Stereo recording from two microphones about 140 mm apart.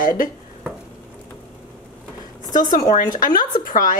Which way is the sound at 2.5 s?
65° left (ahead or behind).